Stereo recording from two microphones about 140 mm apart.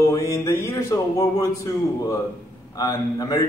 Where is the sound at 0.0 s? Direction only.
20° left (ahead or behind).